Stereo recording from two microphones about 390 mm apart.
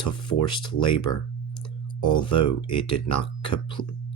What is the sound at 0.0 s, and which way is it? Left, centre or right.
Speech, left.